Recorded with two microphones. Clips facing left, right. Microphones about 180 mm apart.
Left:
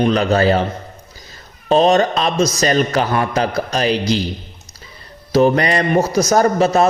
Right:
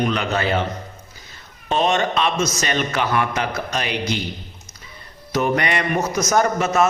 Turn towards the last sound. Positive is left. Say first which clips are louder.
# left 4 dB
turn(degrees=35)  # may be behind; listen again after turning